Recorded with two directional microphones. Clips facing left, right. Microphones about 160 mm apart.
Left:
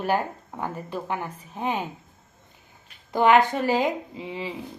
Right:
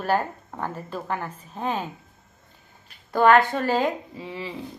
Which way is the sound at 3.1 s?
15° left (ahead or behind).